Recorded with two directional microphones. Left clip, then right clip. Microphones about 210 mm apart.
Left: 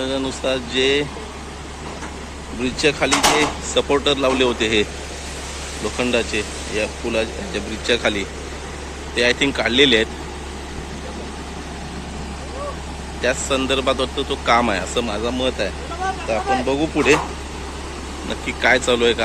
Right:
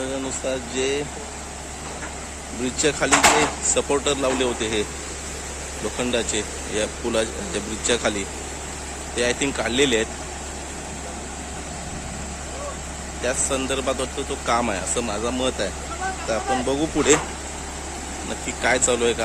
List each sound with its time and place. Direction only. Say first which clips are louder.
0.0 s speech: left 5 dB; centre (ahead or behind)
2.6 s speech: left 3 dB; 10° right (ahead or behind)
6.0 s speech: left 4 dB; 10° right (ahead or behind)
6.7 s speech: left 2 dB; 20° right (ahead or behind); by 10.1 s 5° right (ahead or behind)
13.2 s speech: left 5 dB; centre (ahead or behind)
18.3 s speech: left 5 dB; 5° right (ahead or behind)